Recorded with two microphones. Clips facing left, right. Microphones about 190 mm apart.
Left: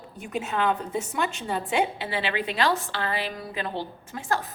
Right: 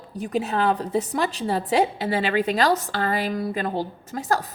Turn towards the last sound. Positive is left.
turn(degrees=-40)  # may be behind; listen again after turning